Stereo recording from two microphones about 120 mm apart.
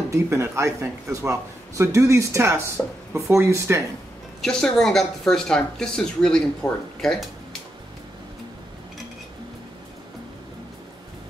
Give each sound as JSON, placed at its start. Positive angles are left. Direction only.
{"t": 0.1, "sound": "a man's voice", "side_deg": -25}
{"t": 4.4, "sound": "a woman's voice", "side_deg": 5}